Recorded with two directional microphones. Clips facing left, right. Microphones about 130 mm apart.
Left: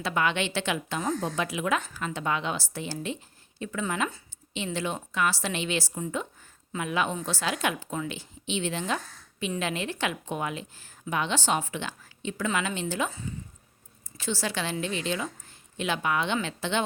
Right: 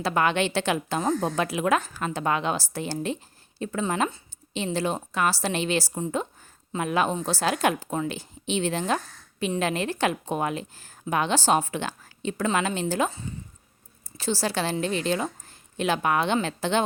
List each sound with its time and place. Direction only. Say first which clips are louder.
0.0 s a woman's voice: right 4 dB; 40° right (ahead or behind)